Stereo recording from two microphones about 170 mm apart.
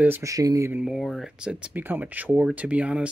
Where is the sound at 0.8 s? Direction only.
Centre (ahead or behind).